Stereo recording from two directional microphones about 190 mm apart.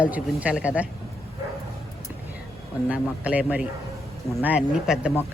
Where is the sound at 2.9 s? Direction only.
5° right (ahead or behind).